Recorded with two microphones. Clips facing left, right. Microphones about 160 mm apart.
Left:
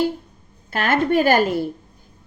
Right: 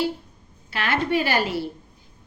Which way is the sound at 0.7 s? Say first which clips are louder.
Left 5 dB; 50° left (ahead or behind).